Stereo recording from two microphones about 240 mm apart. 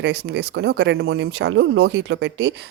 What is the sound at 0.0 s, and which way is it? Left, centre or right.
A woman's voice, right.